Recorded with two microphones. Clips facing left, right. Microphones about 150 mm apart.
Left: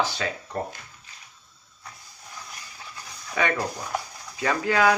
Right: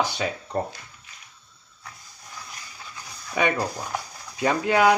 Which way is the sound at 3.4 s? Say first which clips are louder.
Right 2 dB; 15° right (ahead or behind).